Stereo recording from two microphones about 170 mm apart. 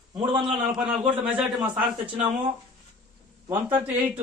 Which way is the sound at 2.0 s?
30° right (ahead or behind).